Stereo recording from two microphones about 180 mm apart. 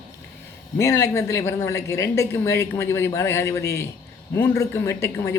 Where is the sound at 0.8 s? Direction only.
15° left (ahead or behind).